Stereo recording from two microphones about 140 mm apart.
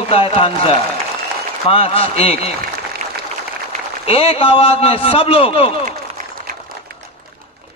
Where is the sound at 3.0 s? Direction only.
70° right (ahead or behind).